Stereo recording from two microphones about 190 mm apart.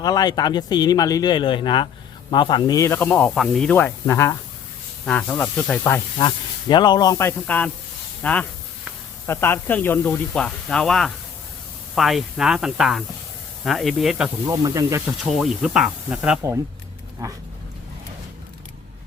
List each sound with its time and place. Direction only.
0.0 s speech: 20° left (ahead or behind)
6.1 s speech: 25° left (ahead or behind); by 14.3 s centre (ahead or behind)
14.4 s speech: 15° right (ahead or behind)
15.2 s speech: centre (ahead or behind)